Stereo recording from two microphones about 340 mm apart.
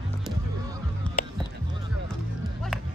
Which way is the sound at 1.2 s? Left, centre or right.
Left.